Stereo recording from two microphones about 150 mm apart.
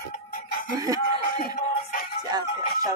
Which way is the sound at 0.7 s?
20° right (ahead or behind).